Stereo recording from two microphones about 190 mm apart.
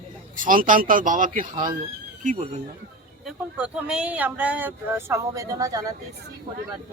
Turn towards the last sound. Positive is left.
turn(degrees=-20)  # may be behind; listen again after turning